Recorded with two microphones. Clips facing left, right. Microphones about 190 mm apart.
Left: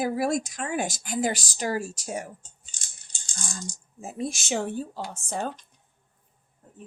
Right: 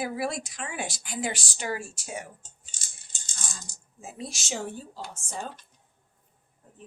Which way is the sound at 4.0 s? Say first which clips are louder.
Left 7 dB; 50° left (ahead or behind).